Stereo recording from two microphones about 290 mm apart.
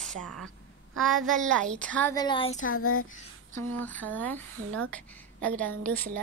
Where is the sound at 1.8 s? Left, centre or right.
Centre.